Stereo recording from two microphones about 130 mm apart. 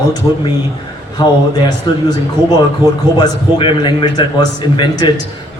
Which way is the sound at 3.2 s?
40° left (ahead or behind).